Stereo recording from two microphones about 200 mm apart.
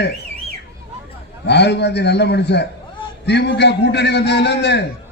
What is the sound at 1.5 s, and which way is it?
A man's voice, 60° left (ahead or behind).